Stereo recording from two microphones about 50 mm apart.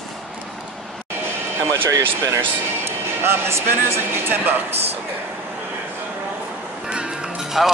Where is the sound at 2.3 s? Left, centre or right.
Right.